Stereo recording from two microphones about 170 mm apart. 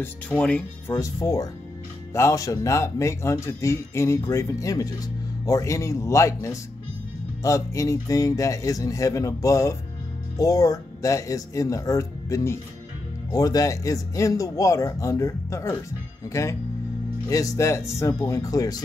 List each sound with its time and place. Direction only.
0.0 s speech: 5° left (ahead or behind)
0.9 s speech: 20° left (ahead or behind)